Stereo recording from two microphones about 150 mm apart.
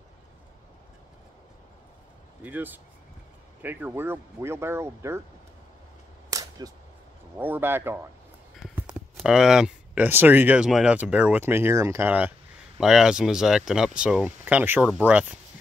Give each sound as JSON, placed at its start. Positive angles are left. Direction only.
{"t": 2.4, "sound": "speech", "side_deg": -10}
{"t": 6.3, "sound": "cap gun", "side_deg": -25}
{"t": 7.3, "sound": "speech", "side_deg": -15}